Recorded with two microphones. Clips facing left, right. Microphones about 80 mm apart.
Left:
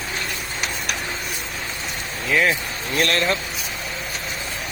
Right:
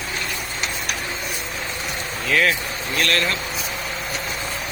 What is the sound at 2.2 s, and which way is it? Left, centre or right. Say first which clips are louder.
Speech: even; centre.